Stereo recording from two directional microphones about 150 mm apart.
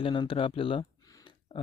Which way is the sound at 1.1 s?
35° left (ahead or behind).